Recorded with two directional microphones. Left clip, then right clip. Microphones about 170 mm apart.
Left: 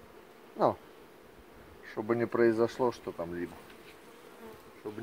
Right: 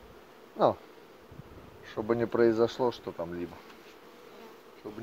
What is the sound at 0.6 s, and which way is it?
Speech, 30° right (ahead or behind).